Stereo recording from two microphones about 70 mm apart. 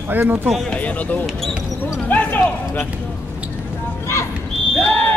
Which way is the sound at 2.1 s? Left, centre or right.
Left.